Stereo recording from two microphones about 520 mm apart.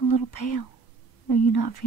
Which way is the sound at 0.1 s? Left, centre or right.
Left.